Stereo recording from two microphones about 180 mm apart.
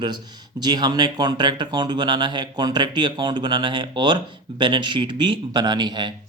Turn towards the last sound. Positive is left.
turn(degrees=-25)  # may be behind; listen again after turning